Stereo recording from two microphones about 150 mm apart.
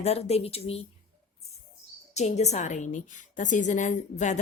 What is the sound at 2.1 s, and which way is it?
Speech, 50° left (ahead or behind).